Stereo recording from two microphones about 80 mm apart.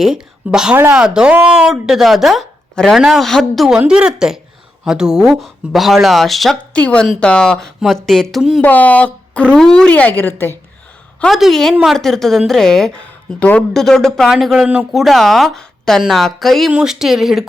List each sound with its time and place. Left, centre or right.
0.0 s a woman's voice: centre
3.8 s a woman's voice: centre
6.7 s a woman's voice: centre
8.6 s speech: left
9.9 s speech: left
11.3 s a woman's voice: centre
11.7 s a woman's voice: centre
11.9 s a woman's voice: centre
13.4 s speech: centre
13.7 s a woman's voice: centre
14.3 s a woman's voice: centre